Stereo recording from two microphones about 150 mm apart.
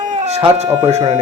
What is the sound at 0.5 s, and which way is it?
Speech, 50° right (ahead or behind).